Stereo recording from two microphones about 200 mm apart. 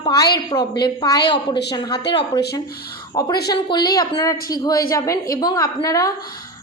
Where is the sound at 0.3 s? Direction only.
20° left (ahead or behind).